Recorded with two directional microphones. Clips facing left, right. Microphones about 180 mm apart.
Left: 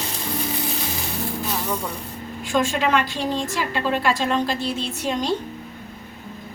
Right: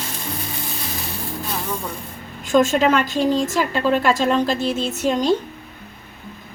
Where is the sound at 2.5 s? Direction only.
45° right (ahead or behind).